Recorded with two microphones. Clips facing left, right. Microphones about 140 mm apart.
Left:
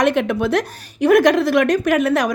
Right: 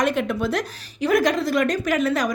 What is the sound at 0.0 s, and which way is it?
A woman's voice, 70° left (ahead or behind).